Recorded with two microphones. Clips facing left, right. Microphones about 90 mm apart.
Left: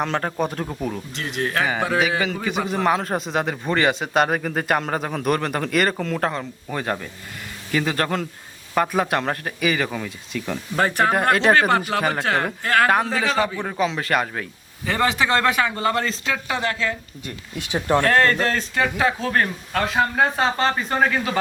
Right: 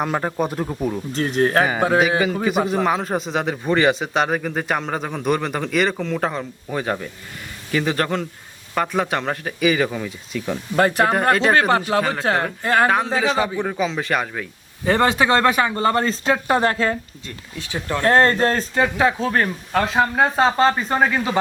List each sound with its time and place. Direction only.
0.0 s speech: 10° right (ahead or behind)
1.1 s speech: 40° right (ahead or behind)
2.2 s a man's voice: 5° right (ahead or behind)
12.6 s a man's voice: 25° right (ahead or behind)
13.1 s a man's voice: 5° right (ahead or behind)
14.8 s speech: 40° right (ahead or behind)
17.2 s speech: 15° left (ahead or behind)
18.0 s a man's voice: 30° right (ahead or behind); by 21.3 s 10° right (ahead or behind)